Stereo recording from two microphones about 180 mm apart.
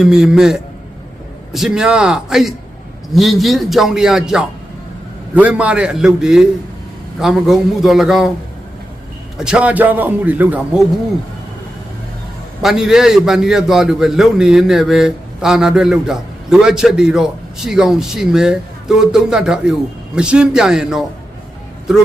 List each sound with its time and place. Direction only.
0.0 s a man's voice: 5° right (ahead or behind)
9.4 s a man's voice: 5° right (ahead or behind)
12.6 s a man's voice: centre (ahead or behind)